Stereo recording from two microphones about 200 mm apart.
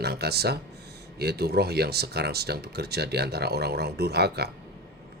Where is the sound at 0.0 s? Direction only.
55° right (ahead or behind).